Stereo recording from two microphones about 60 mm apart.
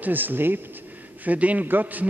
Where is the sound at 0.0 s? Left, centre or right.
Right.